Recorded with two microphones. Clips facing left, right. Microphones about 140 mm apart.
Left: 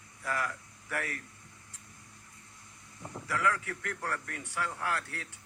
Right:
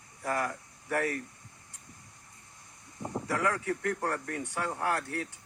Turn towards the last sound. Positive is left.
turn(degrees=-35)  # may be behind; listen again after turning